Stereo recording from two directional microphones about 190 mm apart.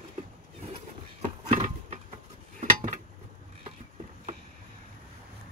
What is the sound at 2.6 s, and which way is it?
Dishes, 40° right (ahead or behind).